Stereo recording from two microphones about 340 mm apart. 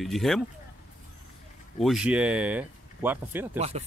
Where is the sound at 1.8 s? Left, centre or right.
Centre.